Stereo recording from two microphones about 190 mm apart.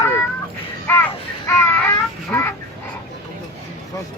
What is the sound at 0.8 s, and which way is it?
A child's voice, 10° left (ahead or behind).